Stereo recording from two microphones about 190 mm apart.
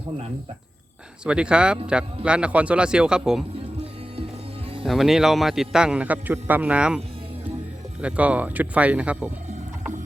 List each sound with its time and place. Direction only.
1.2 s a man's voice: 5° right (ahead or behind)
4.9 s a man's voice: centre (ahead or behind)
8.0 s speech: 5° right (ahead or behind)